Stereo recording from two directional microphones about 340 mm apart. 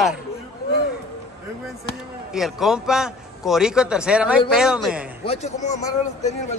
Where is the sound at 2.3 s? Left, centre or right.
Centre.